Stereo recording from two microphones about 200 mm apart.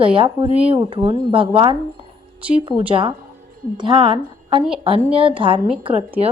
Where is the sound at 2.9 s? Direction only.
25° right (ahead or behind).